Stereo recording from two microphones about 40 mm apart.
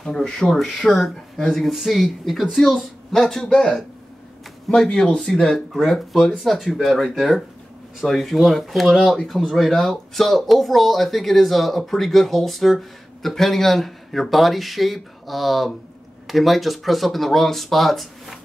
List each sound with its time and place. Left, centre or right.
0.0 s speech: centre
5.2 s speech: centre